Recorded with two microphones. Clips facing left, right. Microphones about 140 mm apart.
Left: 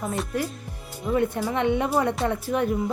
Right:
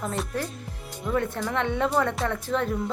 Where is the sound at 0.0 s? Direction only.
10° left (ahead or behind).